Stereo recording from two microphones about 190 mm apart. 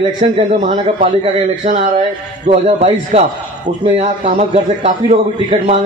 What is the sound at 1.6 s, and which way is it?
A man's voice, 40° right (ahead or behind).